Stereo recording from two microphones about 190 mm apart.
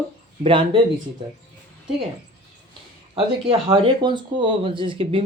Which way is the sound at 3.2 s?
30° right (ahead or behind).